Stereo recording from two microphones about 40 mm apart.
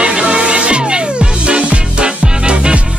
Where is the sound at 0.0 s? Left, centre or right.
Right.